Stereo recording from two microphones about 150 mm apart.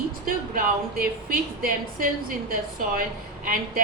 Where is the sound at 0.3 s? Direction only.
75° right (ahead or behind).